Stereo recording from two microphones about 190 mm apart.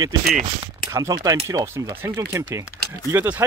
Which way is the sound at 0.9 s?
20° right (ahead or behind).